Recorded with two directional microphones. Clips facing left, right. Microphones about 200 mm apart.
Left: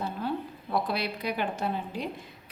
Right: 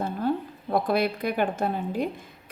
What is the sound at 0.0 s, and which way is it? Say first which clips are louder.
A woman's voice: right 5 dB; 50° right (ahead or behind).